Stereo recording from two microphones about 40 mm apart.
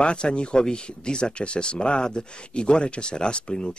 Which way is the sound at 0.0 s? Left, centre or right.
Left.